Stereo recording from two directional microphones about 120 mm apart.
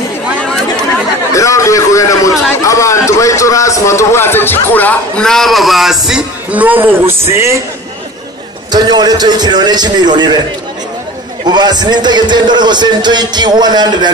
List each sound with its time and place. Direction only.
0.4 s chatter: 5° left (ahead or behind)
1.3 s a sound: 25° left (ahead or behind)
2.5 s a man's voice: 25° left (ahead or behind); by 7.5 s 20° right (ahead or behind)
8.7 s a man's voice: 35° right (ahead or behind)
11.4 s a man's voice: 35° right (ahead or behind)